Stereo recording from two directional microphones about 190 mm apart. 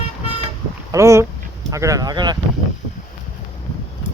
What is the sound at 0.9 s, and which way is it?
Speech, 15° right (ahead or behind).